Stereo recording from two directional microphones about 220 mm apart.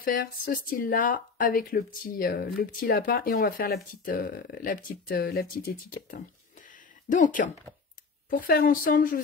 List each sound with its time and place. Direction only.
0.0 s speech: 40° left (ahead or behind)